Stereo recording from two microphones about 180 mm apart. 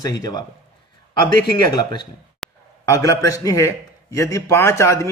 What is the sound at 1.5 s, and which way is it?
Speech, 20° left (ahead or behind).